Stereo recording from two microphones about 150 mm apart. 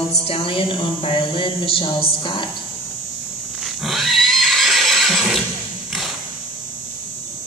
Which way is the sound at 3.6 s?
Centre (ahead or behind).